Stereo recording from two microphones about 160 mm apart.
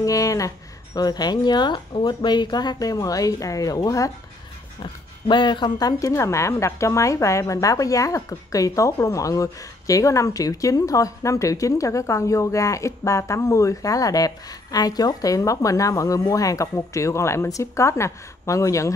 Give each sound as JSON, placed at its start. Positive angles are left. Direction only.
{"t": 0.0, "sound": "a woman's voice", "side_deg": 20}
{"t": 5.3, "sound": "a woman's voice", "side_deg": 30}